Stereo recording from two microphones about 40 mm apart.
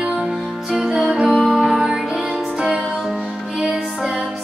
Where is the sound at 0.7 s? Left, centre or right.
Centre.